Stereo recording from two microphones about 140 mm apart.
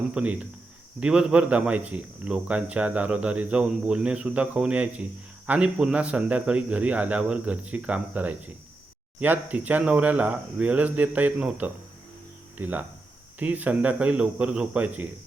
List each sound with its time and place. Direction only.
0.1 s speech: 10° right (ahead or behind)